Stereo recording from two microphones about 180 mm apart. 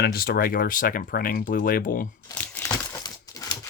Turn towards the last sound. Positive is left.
turn(degrees=20)  # may be behind; listen again after turning